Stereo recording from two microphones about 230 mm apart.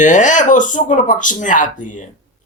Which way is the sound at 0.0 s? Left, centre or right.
Left.